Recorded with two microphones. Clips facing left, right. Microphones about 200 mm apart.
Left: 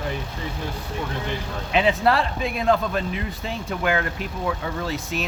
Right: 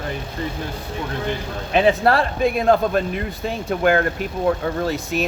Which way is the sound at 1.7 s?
45° right (ahead or behind).